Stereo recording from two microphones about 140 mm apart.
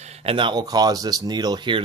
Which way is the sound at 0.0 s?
45° right (ahead or behind).